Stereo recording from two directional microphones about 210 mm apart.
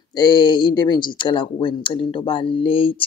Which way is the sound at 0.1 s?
20° left (ahead or behind).